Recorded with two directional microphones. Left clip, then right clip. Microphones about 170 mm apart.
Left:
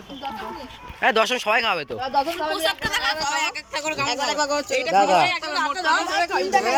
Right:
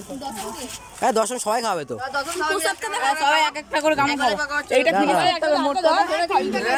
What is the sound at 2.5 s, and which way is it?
Speech, 50° right (ahead or behind).